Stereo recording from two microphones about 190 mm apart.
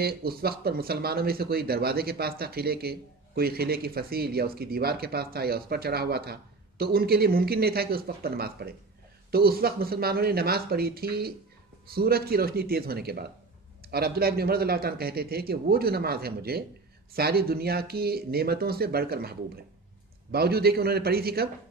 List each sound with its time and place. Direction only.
0.0 s a man's voice: 55° right (ahead or behind)